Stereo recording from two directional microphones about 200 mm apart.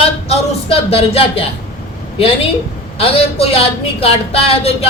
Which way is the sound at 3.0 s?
30° left (ahead or behind).